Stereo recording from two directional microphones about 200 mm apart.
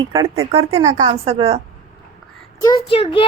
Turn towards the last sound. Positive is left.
turn(degrees=25)  # may be behind; listen again after turning